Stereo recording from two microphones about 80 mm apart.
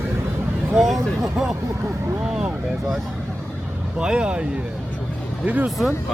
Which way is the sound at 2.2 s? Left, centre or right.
Centre.